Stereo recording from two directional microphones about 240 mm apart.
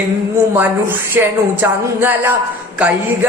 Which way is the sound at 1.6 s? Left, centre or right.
Centre.